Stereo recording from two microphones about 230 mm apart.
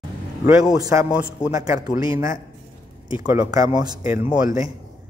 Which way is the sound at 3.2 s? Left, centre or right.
Centre.